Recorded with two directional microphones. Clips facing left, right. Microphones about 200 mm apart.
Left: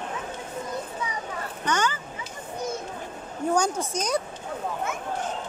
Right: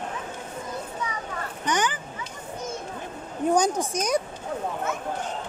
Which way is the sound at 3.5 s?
15° right (ahead or behind).